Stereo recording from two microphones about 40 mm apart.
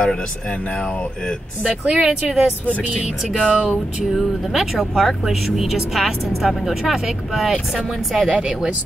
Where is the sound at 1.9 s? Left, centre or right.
Centre.